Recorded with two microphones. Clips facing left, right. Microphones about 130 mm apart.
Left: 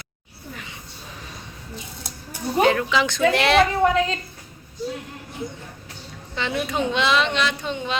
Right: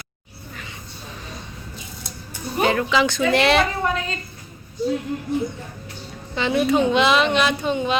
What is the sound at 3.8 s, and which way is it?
Speech, 90° left.